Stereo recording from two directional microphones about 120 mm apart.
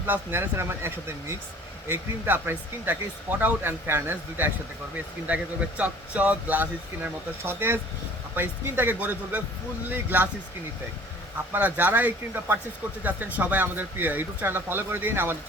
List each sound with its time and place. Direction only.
0.0 s speech: 20° right (ahead or behind)
11.5 s speech: 15° right (ahead or behind)